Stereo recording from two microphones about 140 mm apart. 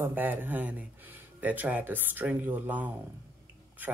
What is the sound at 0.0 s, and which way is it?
Speech, 15° right (ahead or behind).